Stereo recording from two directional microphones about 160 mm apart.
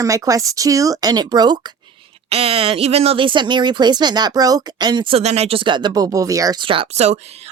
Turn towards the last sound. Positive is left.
turn(degrees=-40)  # may be behind; listen again after turning